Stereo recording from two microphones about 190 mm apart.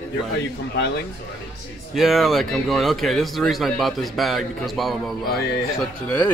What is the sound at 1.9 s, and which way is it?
Speech, centre (ahead or behind).